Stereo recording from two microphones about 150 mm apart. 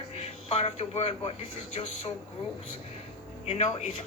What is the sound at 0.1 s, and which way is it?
Speech, 45° left (ahead or behind).